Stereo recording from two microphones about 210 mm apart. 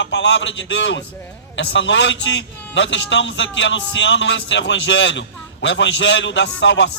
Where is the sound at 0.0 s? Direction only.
60° left (ahead or behind).